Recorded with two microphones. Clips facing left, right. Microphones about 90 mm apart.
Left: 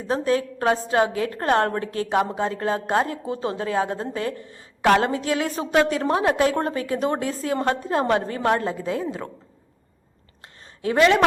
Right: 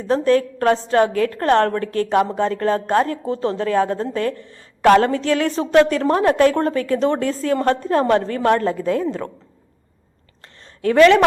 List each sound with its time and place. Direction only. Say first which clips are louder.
0.1 s a woman's voice: right 6 dB; 10° left (ahead or behind)
10.8 s a woman's voice: right 5 dB; 15° left (ahead or behind)